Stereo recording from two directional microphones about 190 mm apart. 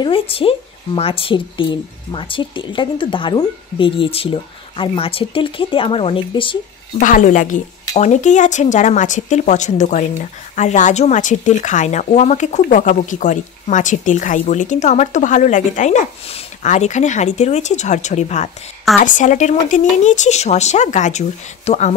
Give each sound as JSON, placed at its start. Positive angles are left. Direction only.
{"t": 0.0, "sound": "speech", "side_deg": 30}
{"t": 7.0, "sound": "speech", "side_deg": 40}